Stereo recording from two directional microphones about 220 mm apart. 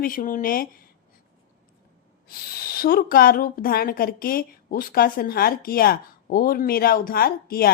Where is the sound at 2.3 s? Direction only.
45° left (ahead or behind).